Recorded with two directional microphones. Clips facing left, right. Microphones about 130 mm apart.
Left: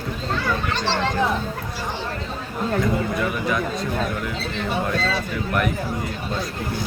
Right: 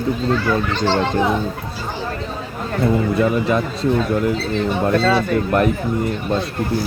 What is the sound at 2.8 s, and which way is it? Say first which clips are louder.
Speech: right 10 dB; 30° right (ahead or behind).